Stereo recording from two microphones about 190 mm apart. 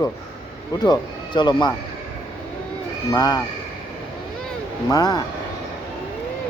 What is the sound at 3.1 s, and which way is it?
Speech, 20° left (ahead or behind).